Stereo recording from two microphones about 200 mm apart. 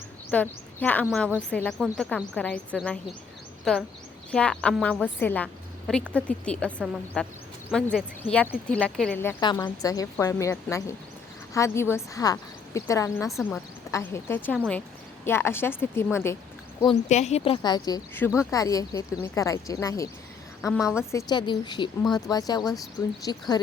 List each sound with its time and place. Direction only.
0.3 s a woman's voice: 5° left (ahead or behind)
9.4 s a woman's voice: 20° left (ahead or behind)
13.3 s a woman's voice: 5° left (ahead or behind)
16.8 s a woman's voice: 30° left (ahead or behind)